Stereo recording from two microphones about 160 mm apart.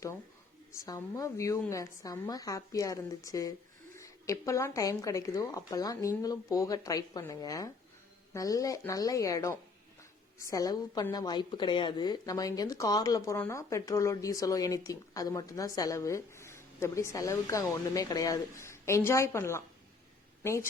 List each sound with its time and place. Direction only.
0.7 s a woman's voice: 20° left (ahead or behind)